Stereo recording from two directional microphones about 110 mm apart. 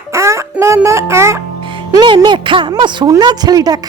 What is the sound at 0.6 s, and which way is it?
Speech, 25° right (ahead or behind).